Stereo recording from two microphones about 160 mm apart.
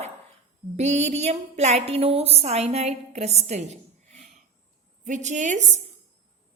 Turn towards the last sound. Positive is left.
turn(degrees=-50)  # may be behind; listen again after turning